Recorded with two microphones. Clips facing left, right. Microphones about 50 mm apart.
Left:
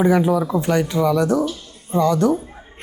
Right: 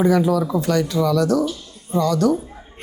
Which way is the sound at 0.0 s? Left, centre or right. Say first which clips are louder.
Left 1 dB; left.